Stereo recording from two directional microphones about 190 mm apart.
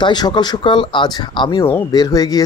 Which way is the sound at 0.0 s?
20° left (ahead or behind).